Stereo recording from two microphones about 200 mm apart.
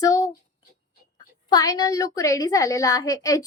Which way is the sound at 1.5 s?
20° left (ahead or behind).